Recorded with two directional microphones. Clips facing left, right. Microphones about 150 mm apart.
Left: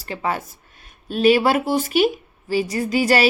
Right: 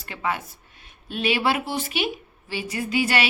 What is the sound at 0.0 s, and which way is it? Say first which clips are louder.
Speech: left 3 dB; 35° left (ahead or behind).